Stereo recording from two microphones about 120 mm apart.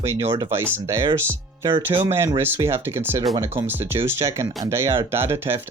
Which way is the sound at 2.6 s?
20° right (ahead or behind).